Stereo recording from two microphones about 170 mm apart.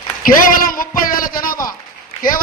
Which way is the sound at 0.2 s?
55° left (ahead or behind).